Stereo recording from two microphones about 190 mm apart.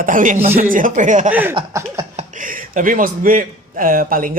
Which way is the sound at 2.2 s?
45° right (ahead or behind).